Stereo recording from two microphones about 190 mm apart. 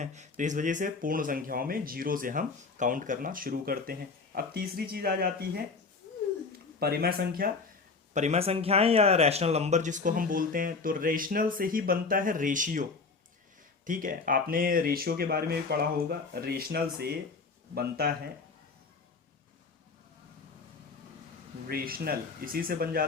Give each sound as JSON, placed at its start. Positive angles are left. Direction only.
{"t": 0.0, "sound": "speech", "side_deg": -40}
{"t": 6.7, "sound": "speech", "side_deg": -55}
{"t": 8.1, "sound": "speech", "side_deg": -35}
{"t": 21.7, "sound": "speech", "side_deg": -50}